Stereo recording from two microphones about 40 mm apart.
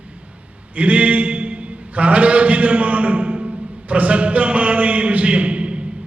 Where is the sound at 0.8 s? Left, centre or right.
Right.